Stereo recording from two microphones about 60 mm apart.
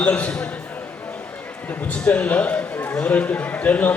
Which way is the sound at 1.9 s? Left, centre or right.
Left.